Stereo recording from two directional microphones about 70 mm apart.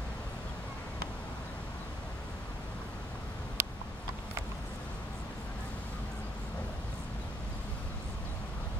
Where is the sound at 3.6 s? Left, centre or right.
Right.